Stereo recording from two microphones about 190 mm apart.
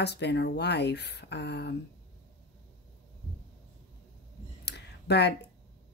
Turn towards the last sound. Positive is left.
turn(degrees=60)  # may be behind; listen again after turning